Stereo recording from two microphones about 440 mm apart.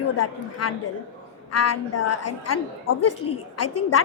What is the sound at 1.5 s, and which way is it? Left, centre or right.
A woman's voice, left.